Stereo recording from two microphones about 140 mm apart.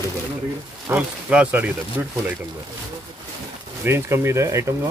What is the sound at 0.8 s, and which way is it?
Speech, 10° right (ahead or behind).